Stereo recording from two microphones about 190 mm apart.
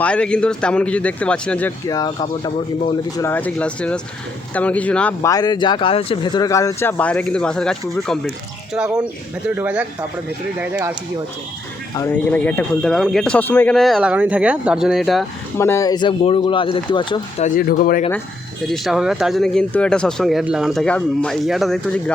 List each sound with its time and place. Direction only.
0.0 s speech: 5° left (ahead or behind)
1.9 s speech: 20° left (ahead or behind)
5.3 s speech: 20° left (ahead or behind); by 10.9 s 10° right (ahead or behind)
11.9 s speech: 10° left (ahead or behind)
15.5 s speech: 15° left (ahead or behind)
17.4 s speech: 50° left (ahead or behind)
18.6 s speech: centre (ahead or behind)